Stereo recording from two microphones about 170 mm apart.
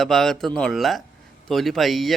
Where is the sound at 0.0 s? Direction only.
Centre (ahead or behind).